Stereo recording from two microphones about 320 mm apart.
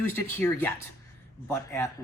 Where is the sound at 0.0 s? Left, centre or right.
Centre.